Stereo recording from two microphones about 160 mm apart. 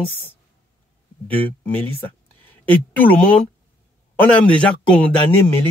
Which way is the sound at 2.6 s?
10° left (ahead or behind).